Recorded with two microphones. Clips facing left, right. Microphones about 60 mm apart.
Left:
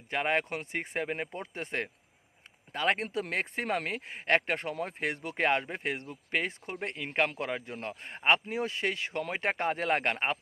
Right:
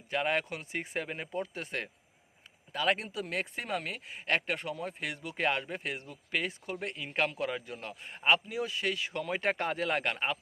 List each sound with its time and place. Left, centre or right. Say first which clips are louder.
0.1 s speech: left 1 dB; left
9.3 s speech: even; left